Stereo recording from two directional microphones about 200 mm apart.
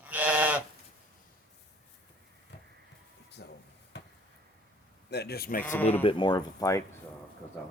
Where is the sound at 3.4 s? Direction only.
60° left (ahead or behind).